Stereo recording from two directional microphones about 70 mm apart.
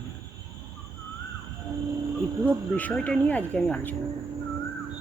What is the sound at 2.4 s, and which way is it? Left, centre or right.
Speech, left.